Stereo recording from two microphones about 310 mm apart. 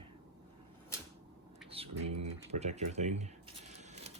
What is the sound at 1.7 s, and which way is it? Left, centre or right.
Speech, centre.